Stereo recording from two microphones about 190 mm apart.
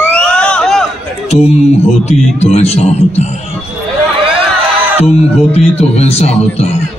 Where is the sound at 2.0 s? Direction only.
35° left (ahead or behind).